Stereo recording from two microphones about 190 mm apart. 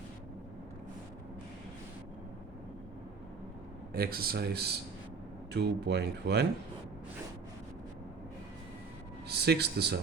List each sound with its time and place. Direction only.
3.9 s speech: 55° right (ahead or behind)
9.2 s speech: 60° right (ahead or behind)